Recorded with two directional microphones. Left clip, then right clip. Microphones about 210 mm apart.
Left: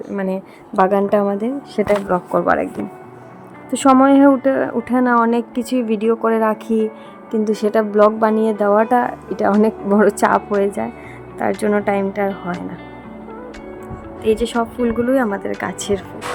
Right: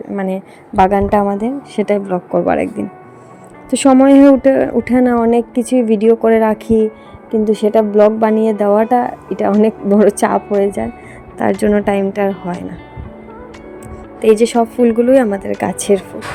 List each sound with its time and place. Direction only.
0.1 s a woman's voice: 15° right (ahead or behind)
3.7 s a woman's voice: 20° right (ahead or behind)
11.3 s speech: 25° right (ahead or behind)
12.3 s speech: centre (ahead or behind)
14.2 s speech: 25° right (ahead or behind)